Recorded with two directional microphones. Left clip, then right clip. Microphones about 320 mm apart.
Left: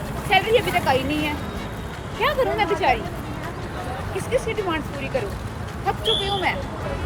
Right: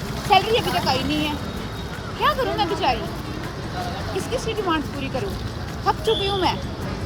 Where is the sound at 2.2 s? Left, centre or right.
Centre.